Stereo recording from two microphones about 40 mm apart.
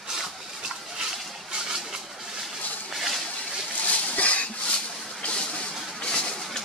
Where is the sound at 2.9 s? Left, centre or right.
Centre.